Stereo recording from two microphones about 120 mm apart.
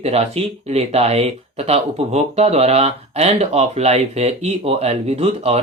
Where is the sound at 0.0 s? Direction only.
60° right (ahead or behind).